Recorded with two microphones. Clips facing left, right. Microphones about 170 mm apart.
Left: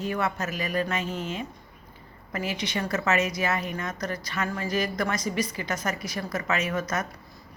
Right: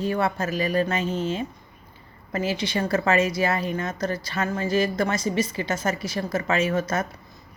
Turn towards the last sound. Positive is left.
turn(degrees=-30)  # may be behind; listen again after turning